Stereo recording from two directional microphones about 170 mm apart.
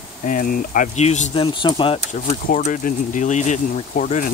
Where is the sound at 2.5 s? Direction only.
50° left (ahead or behind).